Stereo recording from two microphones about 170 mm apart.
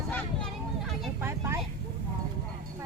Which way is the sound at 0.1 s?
Centre (ahead or behind).